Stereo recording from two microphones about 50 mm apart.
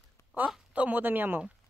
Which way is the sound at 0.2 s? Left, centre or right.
Left.